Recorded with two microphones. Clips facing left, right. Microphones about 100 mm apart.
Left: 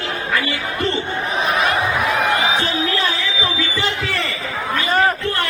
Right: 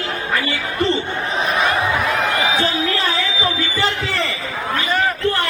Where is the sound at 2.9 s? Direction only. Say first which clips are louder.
Right 1 dB; 35° right (ahead or behind).